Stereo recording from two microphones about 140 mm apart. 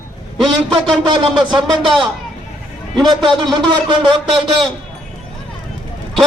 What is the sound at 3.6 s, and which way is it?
Speech, 30° right (ahead or behind).